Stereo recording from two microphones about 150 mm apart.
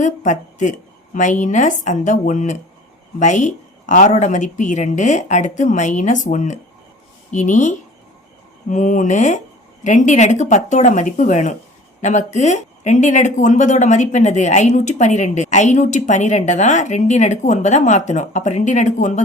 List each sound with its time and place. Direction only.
0.0 s speech: 55° left (ahead or behind)